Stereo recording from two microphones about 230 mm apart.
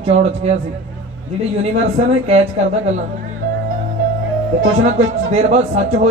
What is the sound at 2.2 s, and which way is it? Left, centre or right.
Speech, right.